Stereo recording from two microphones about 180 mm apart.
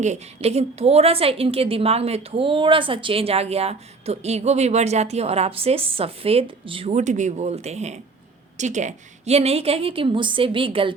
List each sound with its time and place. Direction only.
0.0 s a woman's voice: 40° right (ahead or behind)